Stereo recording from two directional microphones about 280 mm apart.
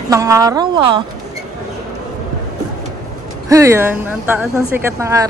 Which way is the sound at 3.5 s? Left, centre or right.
Centre.